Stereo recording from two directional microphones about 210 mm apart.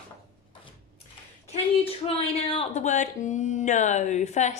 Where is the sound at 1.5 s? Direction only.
30° left (ahead or behind).